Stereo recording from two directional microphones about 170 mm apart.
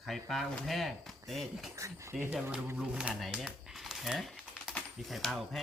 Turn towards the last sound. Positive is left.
turn(degrees=0)  # may be behind; listen again after turning